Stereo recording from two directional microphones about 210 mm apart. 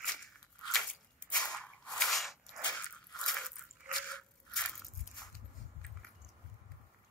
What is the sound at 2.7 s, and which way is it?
Biting, centre (ahead or behind).